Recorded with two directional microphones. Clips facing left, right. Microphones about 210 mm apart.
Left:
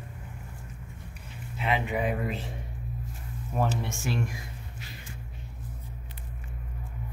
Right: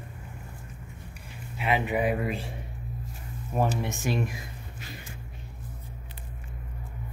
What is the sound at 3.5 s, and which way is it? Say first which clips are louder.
Speech: right 2 dB; 15° right (ahead or behind).